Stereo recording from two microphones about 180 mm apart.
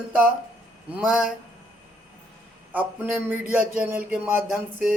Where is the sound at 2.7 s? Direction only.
10° right (ahead or behind).